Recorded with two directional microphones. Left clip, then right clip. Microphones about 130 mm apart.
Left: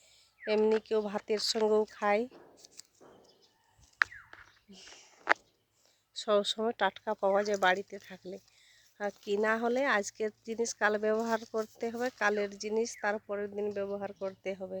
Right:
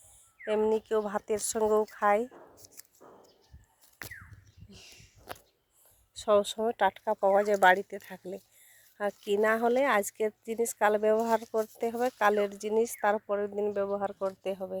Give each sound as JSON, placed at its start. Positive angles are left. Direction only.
{"t": 0.4, "sound": "speech", "side_deg": 25}
{"t": 2.2, "sound": "a sound", "side_deg": 10}
{"t": 6.1, "sound": "speech", "side_deg": 0}
{"t": 7.4, "sound": "speech", "side_deg": -15}